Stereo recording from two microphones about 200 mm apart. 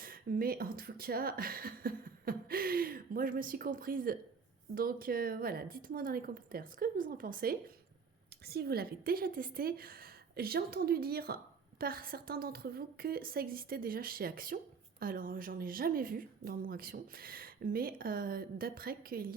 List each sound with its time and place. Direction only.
0.0 s a woman's voice: 45° right (ahead or behind)